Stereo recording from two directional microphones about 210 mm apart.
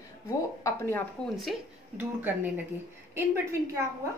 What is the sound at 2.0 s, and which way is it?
Speech, 10° right (ahead or behind).